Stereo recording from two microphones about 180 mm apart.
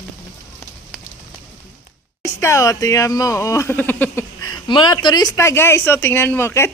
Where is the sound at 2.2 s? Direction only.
15° left (ahead or behind).